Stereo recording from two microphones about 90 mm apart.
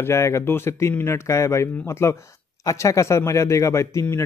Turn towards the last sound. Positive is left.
turn(degrees=30)  # may be behind; listen again after turning